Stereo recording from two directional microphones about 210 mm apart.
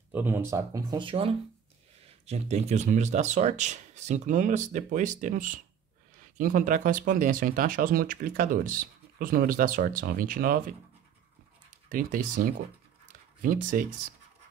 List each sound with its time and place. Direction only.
0.1 s speech: 10° right (ahead or behind); by 10.6 s 45° right (ahead or behind)
11.9 s speech: 40° right (ahead or behind)